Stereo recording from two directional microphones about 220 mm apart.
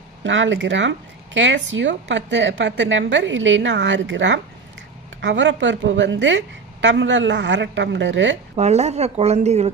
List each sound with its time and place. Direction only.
0.2 s speech: 55° right (ahead or behind)
8.5 s a woman's voice: 30° right (ahead or behind)